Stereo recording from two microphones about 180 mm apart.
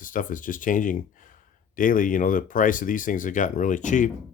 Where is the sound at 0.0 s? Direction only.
50° left (ahead or behind).